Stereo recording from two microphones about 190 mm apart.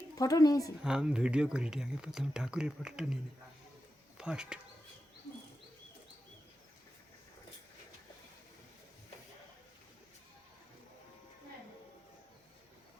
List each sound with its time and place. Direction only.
0.2 s speech: 20° left (ahead or behind)
0.9 s speech: 5° right (ahead or behind)
4.2 s speech: 5° right (ahead or behind)